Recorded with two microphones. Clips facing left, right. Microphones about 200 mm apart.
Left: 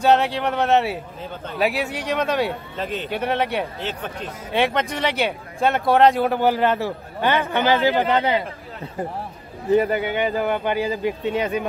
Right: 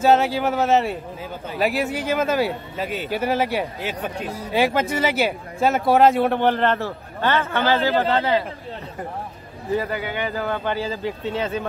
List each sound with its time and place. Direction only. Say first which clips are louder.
0.0 s speech: right 1 dB; centre (ahead or behind); by 8.4 s 15° left (ahead or behind)
9.8 s speech: left 4 dB; 20° left (ahead or behind)